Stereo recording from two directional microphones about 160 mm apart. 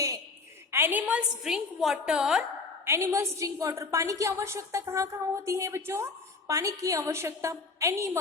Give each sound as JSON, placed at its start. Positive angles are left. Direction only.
{"t": 0.7, "sound": "a woman's voice", "side_deg": -15}
{"t": 2.8, "sound": "a woman's voice", "side_deg": -15}